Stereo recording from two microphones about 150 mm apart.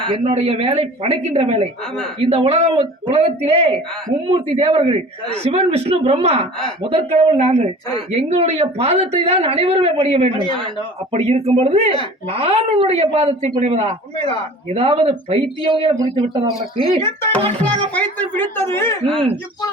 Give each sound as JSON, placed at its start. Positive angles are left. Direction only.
{"t": 0.1, "sound": "speech", "side_deg": -45}
{"t": 17.6, "sound": "a woman's voice", "side_deg": 10}